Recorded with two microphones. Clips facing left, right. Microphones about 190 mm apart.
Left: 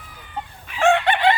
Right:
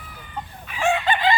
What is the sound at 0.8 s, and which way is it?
Chicken, 75° left (ahead or behind).